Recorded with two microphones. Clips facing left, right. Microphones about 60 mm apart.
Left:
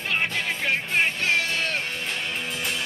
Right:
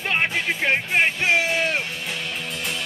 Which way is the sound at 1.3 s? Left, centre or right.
Centre.